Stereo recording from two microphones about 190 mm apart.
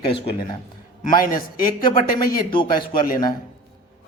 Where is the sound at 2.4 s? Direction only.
25° left (ahead or behind).